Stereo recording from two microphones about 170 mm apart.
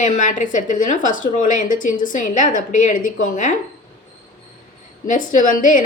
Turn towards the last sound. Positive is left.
turn(degrees=50)  # may be behind; listen again after turning